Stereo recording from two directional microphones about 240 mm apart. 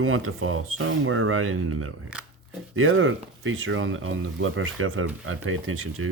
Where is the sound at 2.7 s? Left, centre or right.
Right.